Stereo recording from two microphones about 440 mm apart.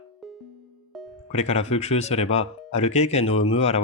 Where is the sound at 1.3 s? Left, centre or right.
Centre.